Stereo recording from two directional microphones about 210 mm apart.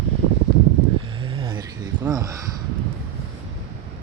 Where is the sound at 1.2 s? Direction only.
25° right (ahead or behind).